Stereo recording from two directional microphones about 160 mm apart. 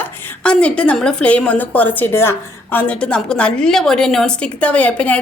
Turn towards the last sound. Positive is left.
turn(degrees=10)  # may be behind; listen again after turning